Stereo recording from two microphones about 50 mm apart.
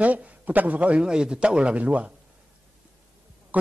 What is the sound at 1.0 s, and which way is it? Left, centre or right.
Speech, centre.